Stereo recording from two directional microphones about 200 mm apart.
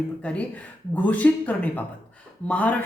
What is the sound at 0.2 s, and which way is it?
Speech, 5° left (ahead or behind).